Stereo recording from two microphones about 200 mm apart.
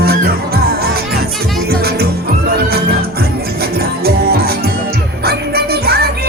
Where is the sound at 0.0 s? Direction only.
50° right (ahead or behind).